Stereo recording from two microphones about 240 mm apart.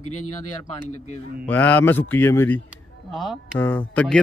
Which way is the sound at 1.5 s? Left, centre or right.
Centre.